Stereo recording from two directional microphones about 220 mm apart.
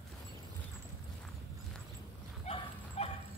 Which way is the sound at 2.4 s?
30° left (ahead or behind).